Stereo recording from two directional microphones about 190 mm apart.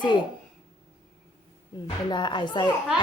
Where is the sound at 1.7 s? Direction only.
25° left (ahead or behind).